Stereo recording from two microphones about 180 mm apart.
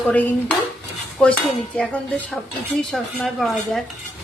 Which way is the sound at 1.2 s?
5° left (ahead or behind).